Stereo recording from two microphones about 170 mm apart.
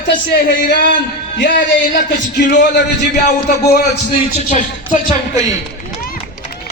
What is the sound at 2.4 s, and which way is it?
A man's voice, 75° left (ahead or behind).